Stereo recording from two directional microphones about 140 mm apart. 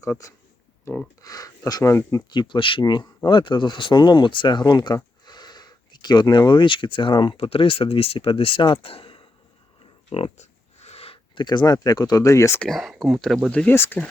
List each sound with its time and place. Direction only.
1.2 s speech: 25° left (ahead or behind)
12.5 s speech: centre (ahead or behind)